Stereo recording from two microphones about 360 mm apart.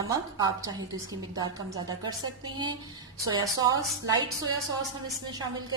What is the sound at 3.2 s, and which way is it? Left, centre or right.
A woman's voice, centre.